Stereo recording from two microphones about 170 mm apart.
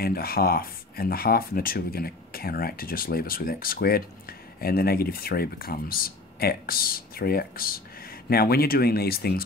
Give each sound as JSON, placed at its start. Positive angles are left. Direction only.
{"t": 0.0, "sound": "speech", "side_deg": 60}